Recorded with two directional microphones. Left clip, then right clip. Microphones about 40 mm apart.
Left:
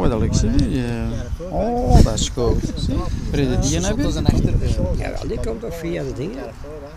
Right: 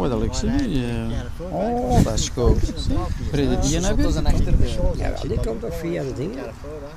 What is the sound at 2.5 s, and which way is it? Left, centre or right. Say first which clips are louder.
Speech: left 1 dB; left.